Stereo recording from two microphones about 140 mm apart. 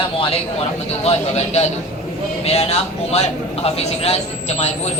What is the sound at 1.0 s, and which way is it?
A man's voice, 50° left (ahead or behind).